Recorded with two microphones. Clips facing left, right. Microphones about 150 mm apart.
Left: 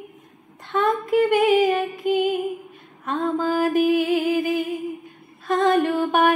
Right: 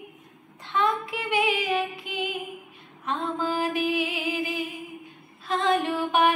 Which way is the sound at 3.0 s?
50° left (ahead or behind).